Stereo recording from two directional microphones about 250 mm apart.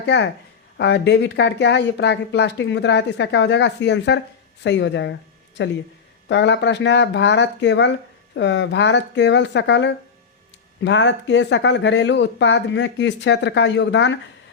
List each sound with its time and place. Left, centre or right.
0.0 s speech: left